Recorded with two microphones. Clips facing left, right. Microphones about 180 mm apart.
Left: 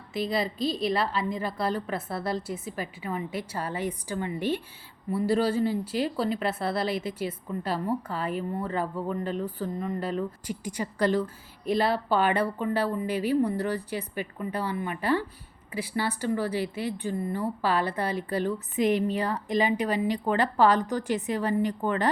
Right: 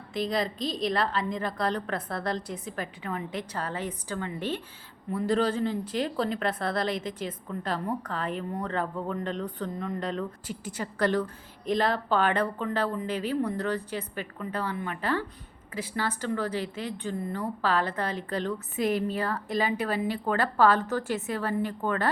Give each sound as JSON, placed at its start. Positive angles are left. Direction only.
{"t": 0.1, "sound": "a woman's voice", "side_deg": 5}